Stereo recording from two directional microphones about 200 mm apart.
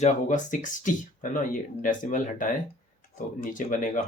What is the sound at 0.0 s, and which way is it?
Speech, 40° left (ahead or behind).